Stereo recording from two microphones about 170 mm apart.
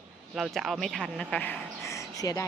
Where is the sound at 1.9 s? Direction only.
20° left (ahead or behind).